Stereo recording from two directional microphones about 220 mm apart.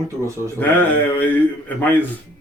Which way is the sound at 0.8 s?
10° left (ahead or behind).